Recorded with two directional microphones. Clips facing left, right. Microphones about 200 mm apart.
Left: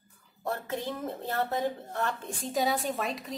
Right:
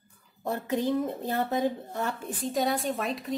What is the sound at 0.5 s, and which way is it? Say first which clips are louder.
A woman's voice: right 6 dB; 15° right (ahead or behind).